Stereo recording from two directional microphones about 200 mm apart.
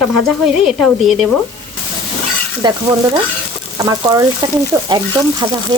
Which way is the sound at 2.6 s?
20° right (ahead or behind).